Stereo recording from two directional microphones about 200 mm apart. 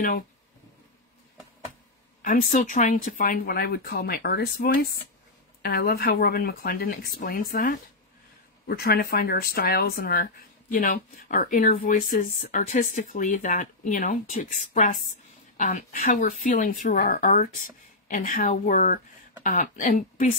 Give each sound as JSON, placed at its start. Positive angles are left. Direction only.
{"t": 2.2, "sound": "speech", "side_deg": 45}